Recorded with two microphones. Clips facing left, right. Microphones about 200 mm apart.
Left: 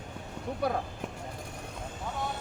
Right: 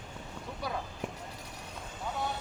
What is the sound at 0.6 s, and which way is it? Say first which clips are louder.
Speech: left 7 dB; 55° left (ahead or behind).